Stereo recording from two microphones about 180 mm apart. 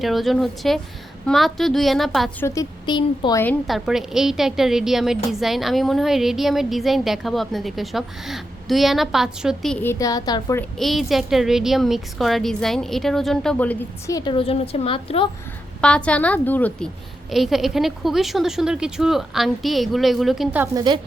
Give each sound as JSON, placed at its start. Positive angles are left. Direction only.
{"t": 0.0, "sound": "a woman's voice", "side_deg": 0}
{"t": 2.4, "sound": "a woman's voice", "side_deg": 20}
{"t": 3.7, "sound": "a woman's voice", "side_deg": 0}
{"t": 9.7, "sound": "a woman's voice", "side_deg": 15}
{"t": 10.6, "sound": "a woman's voice", "side_deg": 0}
{"t": 14.2, "sound": "a woman's voice", "side_deg": 30}
{"t": 15.8, "sound": "a woman's voice", "side_deg": 5}
{"t": 20.7, "sound": "a woman's voice", "side_deg": -25}